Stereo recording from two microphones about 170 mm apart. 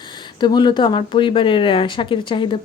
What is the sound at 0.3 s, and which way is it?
Speech, 25° left (ahead or behind).